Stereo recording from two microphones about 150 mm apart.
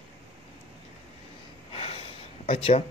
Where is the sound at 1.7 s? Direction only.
40° left (ahead or behind).